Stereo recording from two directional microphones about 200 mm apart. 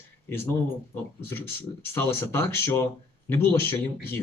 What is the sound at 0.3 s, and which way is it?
Speech, 10° left (ahead or behind).